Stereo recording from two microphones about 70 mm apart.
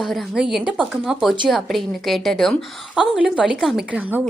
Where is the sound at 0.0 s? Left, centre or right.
Centre.